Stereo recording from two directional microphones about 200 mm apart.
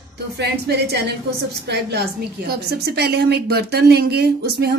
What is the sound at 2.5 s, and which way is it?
Speech, 55° right (ahead or behind).